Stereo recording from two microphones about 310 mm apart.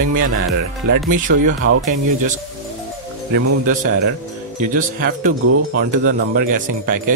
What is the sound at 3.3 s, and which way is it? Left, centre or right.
Speech, right.